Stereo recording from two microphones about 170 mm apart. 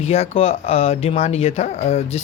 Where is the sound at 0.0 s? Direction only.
35° left (ahead or behind).